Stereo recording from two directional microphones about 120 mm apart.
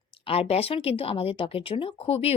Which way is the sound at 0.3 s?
55° left (ahead or behind).